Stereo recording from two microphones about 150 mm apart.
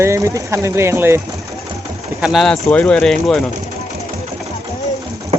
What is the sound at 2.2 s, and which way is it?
Speech, centre (ahead or behind).